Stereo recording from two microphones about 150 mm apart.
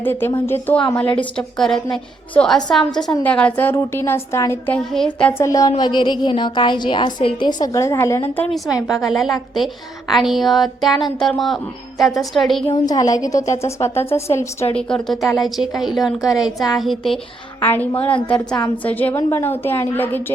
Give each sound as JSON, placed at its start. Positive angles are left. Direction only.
{"t": 0.0, "sound": "a woman's voice", "side_deg": 15}
{"t": 3.0, "sound": "speech", "side_deg": 25}
{"t": 3.2, "sound": "a woman's voice", "side_deg": 10}
{"t": 4.7, "sound": "speech", "side_deg": 5}
{"t": 8.9, "sound": "speech", "side_deg": 0}
{"t": 12.8, "sound": "a woman's voice", "side_deg": 25}
{"t": 14.8, "sound": "speech", "side_deg": 5}
{"t": 17.6, "sound": "a woman's voice", "side_deg": 15}